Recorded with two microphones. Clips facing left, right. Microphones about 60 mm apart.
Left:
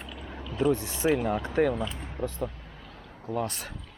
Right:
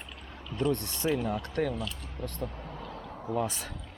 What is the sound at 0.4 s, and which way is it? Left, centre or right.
Speech, centre.